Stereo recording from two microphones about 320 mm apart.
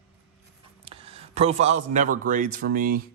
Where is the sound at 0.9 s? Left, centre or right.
Centre.